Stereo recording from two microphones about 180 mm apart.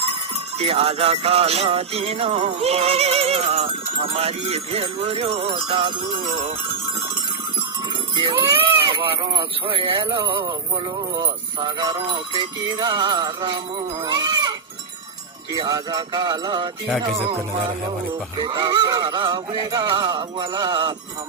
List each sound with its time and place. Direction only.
0.6 s music: 35° right (ahead or behind)
8.1 s goat: 25° right (ahead or behind)
8.9 s music: 25° right (ahead or behind)
15.5 s music: 20° right (ahead or behind)
18.3 s music: 25° right (ahead or behind)